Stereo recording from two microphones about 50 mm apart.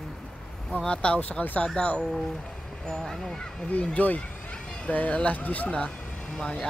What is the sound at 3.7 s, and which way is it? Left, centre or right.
Speech, left.